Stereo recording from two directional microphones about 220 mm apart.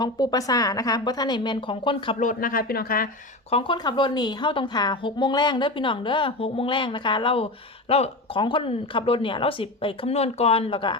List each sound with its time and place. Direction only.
0.0 s speech: 15° left (ahead or behind)
2.2 s speech: 40° left (ahead or behind)
3.5 s a woman's voice: 20° left (ahead or behind)